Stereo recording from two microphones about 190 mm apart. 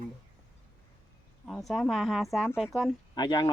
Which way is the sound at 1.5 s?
Centre (ahead or behind).